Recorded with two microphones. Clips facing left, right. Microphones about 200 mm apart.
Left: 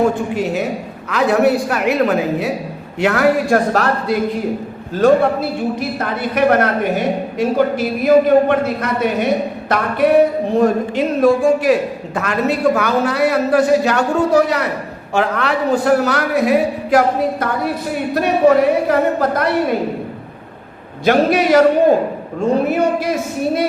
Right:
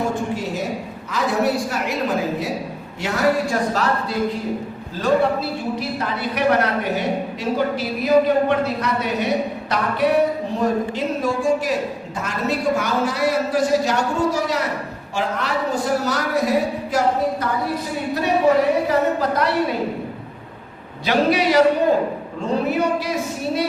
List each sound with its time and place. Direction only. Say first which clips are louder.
0.3 s a man's voice: left 6 dB; 65° left (ahead or behind)
18.1 s a woman's voice: left 4 dB; 55° left (ahead or behind)
21.0 s a woman's voice: left 5 dB; 50° left (ahead or behind)